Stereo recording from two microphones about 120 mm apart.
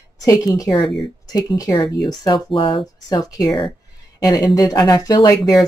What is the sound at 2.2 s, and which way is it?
Speech, 40° left (ahead or behind).